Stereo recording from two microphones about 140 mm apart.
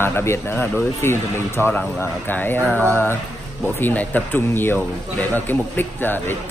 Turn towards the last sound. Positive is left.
turn(degrees=15)  # may be behind; listen again after turning